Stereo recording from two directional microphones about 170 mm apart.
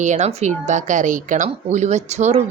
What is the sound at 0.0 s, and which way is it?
A woman's voice, 45° right (ahead or behind).